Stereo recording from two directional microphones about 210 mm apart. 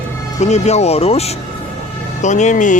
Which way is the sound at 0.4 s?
30° left (ahead or behind).